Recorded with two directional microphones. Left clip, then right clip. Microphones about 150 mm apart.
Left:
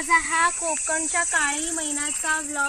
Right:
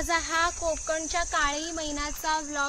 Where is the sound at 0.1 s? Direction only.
35° right (ahead or behind).